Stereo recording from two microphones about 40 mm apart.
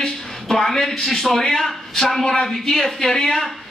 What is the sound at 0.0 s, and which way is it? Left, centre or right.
A man's voice, centre.